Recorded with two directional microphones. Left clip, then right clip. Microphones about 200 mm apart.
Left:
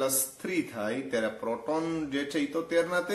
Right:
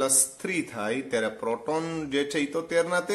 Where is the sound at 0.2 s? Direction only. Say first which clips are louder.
Right 3 dB; 45° right (ahead or behind).